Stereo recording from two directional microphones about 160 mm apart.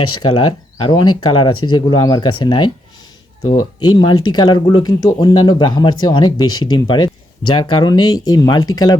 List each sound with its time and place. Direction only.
0.8 s speech: 30° left (ahead or behind)